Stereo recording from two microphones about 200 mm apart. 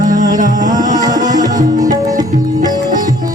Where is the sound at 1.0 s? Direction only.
20° right (ahead or behind).